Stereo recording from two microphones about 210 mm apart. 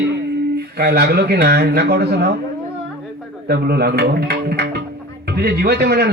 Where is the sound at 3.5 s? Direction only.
50° right (ahead or behind).